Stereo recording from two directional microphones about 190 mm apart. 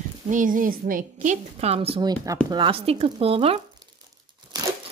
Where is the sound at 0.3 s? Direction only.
45° right (ahead or behind).